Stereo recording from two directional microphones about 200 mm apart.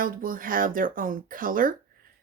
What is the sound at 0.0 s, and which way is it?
A woman's voice, 45° right (ahead or behind).